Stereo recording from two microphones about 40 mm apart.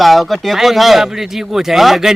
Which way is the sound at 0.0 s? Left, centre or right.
Centre.